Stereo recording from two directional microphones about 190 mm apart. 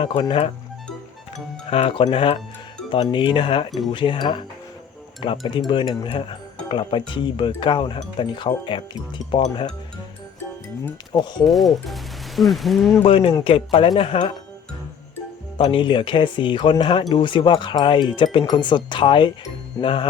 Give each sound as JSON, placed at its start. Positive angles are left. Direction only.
{"t": 0.0, "sound": "speech", "side_deg": 25}
{"t": 1.7, "sound": "speech", "side_deg": 30}
{"t": 3.7, "sound": "speech", "side_deg": 0}
{"t": 3.9, "sound": "speech", "side_deg": 25}
{"t": 11.4, "sound": "speech", "side_deg": 0}
{"t": 13.0, "sound": "speech", "side_deg": 30}
{"t": 15.5, "sound": "speech", "side_deg": 25}